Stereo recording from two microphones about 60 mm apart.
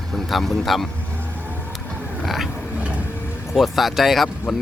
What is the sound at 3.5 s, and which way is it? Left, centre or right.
Speech, centre.